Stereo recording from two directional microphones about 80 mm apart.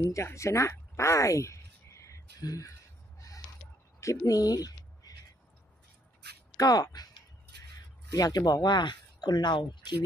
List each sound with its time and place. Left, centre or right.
0.0 s speech: left
4.0 s a sound: left
6.5 s speech: left
8.1 s speech: left